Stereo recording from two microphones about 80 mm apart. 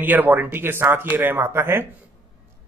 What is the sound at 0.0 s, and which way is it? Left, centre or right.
A man's voice, right.